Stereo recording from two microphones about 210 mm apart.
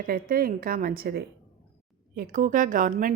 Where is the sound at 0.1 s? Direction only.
45° right (ahead or behind).